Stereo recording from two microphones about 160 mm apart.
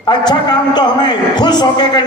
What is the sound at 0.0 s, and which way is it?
A man's voice, 25° left (ahead or behind).